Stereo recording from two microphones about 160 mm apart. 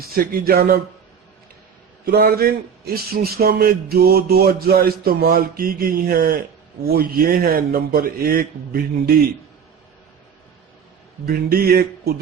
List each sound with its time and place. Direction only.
0.1 s a man's voice: 70° right (ahead or behind)
2.0 s a man's voice: 70° right (ahead or behind)
11.3 s a man's voice: 70° right (ahead or behind)